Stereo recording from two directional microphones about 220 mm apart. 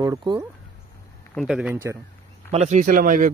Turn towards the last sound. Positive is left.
turn(degrees=-35)  # may be behind; listen again after turning